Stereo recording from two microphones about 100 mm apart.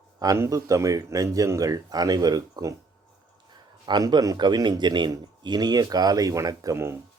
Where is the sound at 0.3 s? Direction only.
30° right (ahead or behind).